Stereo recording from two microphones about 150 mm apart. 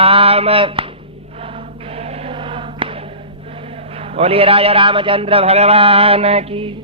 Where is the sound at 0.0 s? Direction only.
40° right (ahead or behind).